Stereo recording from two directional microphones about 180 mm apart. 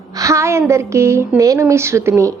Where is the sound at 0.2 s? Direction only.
15° right (ahead or behind).